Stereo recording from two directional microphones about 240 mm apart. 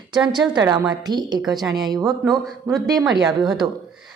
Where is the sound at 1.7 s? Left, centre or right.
Centre.